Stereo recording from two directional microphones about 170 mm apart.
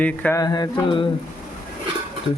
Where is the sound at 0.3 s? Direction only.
25° left (ahead or behind).